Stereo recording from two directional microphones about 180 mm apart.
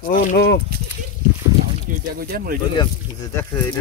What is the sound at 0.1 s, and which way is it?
Speech, 45° left (ahead or behind).